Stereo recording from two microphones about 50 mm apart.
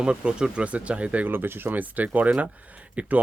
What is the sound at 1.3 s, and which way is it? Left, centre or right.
Speech, right.